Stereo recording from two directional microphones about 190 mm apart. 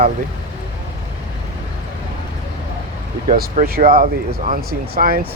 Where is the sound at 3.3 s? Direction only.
45° right (ahead or behind).